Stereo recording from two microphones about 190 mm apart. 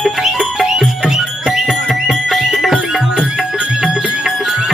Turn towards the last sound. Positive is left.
turn(degrees=0)  # may be behind; listen again after turning